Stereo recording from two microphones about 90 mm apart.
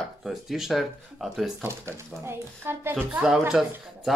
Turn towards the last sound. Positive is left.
turn(degrees=0)  # may be behind; listen again after turning